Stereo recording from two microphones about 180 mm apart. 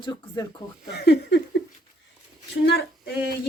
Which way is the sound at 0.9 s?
65° left (ahead or behind).